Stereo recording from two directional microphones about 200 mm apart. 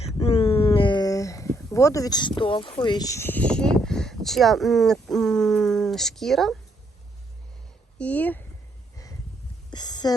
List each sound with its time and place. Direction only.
0.0 s speech: 30° left (ahead or behind); by 6.6 s centre (ahead or behind)
7.9 s speech: 5° left (ahead or behind)
9.6 s a sound: 20° left (ahead or behind)